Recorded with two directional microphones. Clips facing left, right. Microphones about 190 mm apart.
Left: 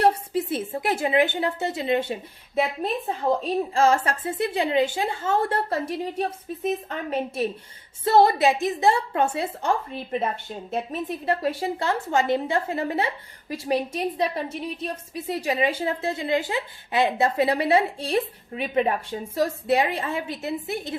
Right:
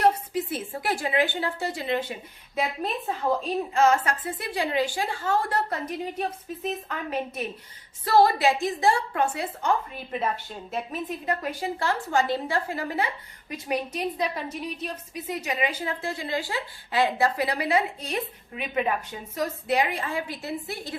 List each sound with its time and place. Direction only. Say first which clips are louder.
0.0 s a woman's voice: left 2 dB; 30° left (ahead or behind)
3.4 s a woman's voice: even; 30° left (ahead or behind)